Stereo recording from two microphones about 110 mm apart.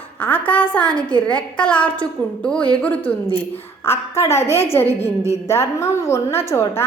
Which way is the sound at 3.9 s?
25° left (ahead or behind).